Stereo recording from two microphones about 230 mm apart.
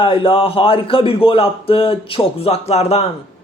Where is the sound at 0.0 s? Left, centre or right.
Left.